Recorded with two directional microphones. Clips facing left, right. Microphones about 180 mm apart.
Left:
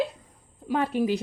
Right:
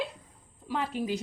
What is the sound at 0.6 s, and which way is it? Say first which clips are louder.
Speech: left 7 dB; 55° left (ahead or behind).